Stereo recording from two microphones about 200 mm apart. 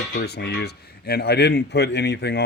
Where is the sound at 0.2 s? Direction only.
55° left (ahead or behind).